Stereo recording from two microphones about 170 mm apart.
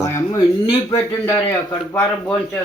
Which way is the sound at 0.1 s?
20° left (ahead or behind).